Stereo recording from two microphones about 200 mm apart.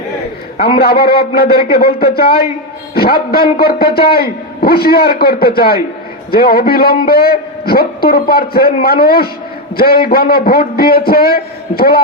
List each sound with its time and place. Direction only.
0.8 s a man's voice: 50° left (ahead or behind)